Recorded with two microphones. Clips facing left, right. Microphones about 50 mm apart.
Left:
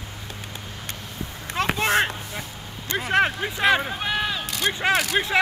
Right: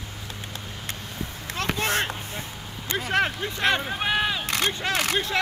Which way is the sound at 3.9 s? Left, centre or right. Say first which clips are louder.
Right 1 dB; centre.